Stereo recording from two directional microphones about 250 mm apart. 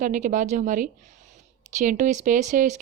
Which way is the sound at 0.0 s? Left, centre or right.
Right.